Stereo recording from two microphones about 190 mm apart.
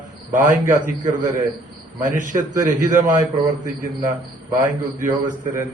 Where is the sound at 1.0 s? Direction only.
40° right (ahead or behind).